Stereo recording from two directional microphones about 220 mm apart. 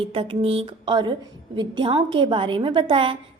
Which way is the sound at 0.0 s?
25° right (ahead or behind).